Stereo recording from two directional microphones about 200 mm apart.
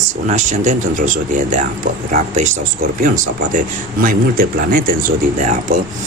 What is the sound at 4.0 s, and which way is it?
Speech, 45° right (ahead or behind).